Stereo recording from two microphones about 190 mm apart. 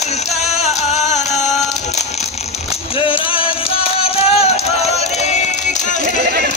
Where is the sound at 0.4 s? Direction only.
35° left (ahead or behind).